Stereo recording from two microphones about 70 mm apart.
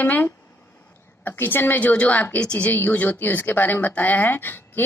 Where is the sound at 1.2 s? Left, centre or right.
Left.